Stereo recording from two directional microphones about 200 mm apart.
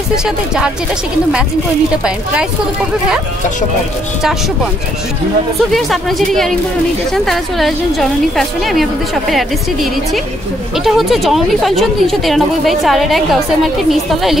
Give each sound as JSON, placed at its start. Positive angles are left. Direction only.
{"t": 5.7, "sound": "a woman's voice", "side_deg": 0}
{"t": 10.8, "sound": "a woman's voice", "side_deg": 0}